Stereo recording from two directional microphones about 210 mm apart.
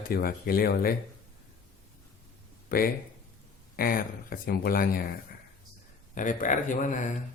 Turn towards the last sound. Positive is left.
turn(degrees=40)  # may be behind; listen again after turning